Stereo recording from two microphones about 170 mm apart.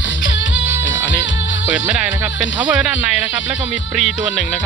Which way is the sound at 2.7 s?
5° right (ahead or behind).